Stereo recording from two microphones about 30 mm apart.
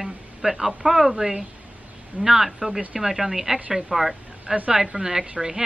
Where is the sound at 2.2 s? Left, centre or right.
Centre.